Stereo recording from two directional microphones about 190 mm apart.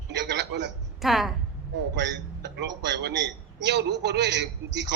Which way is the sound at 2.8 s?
65° right (ahead or behind).